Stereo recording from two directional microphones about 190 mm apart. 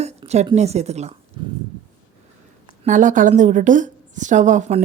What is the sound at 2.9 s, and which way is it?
A woman's voice, 40° right (ahead or behind).